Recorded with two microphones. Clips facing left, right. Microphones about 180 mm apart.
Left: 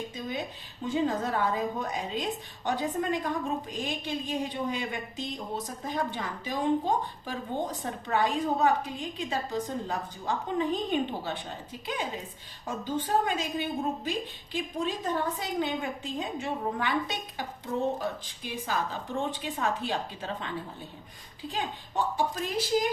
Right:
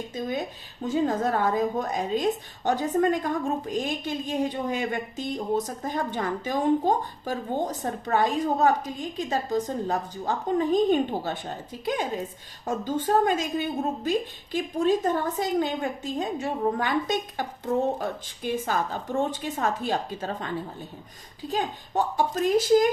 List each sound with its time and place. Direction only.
0.1 s a sound: 45° right (ahead or behind)
0.9 s a woman's voice: 45° right (ahead or behind)
18.4 s a woman's voice: 50° right (ahead or behind)
21.5 s a woman's voice: 45° right (ahead or behind)